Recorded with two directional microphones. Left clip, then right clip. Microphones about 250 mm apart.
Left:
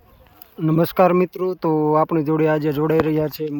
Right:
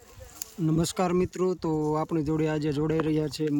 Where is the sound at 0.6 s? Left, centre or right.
Centre.